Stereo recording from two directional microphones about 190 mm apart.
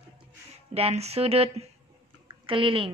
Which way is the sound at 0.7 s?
35° right (ahead or behind).